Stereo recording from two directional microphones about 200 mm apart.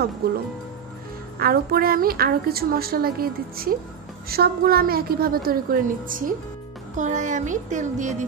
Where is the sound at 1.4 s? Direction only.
50° right (ahead or behind).